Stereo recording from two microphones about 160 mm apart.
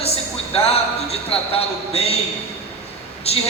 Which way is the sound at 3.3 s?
40° left (ahead or behind).